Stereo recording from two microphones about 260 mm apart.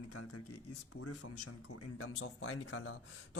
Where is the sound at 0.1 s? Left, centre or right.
Left.